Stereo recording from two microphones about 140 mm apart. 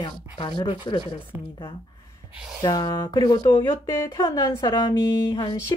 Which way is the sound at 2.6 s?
30° left (ahead or behind).